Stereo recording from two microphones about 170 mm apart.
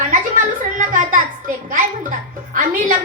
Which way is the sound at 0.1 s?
50° right (ahead or behind).